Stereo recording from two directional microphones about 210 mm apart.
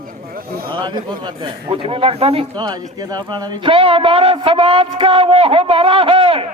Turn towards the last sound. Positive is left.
turn(degrees=-25)  # may be behind; listen again after turning